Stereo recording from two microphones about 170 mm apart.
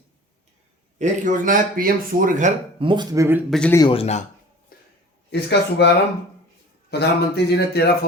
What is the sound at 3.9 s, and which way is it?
Speech, 40° left (ahead or behind).